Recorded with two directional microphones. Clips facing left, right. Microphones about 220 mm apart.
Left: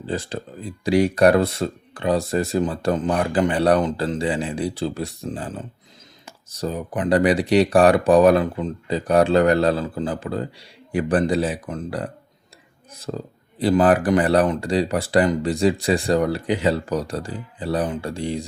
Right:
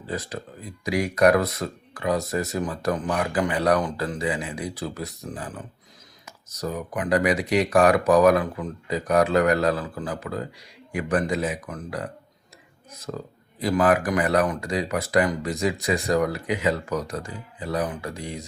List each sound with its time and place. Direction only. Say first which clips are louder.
0.0 s speech: left 4 dB; 30° left (ahead or behind)